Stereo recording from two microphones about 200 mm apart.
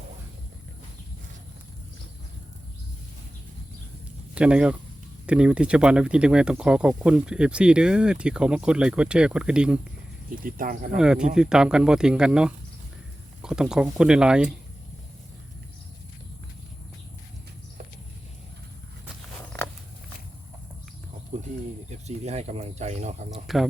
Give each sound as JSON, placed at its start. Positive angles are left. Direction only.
{"t": 4.4, "sound": "speech", "side_deg": -5}
{"t": 10.2, "sound": "speech", "side_deg": -45}
{"t": 10.9, "sound": "speech", "side_deg": -5}
{"t": 21.8, "sound": "speech", "side_deg": -35}
{"t": 23.3, "sound": "speech", "side_deg": 0}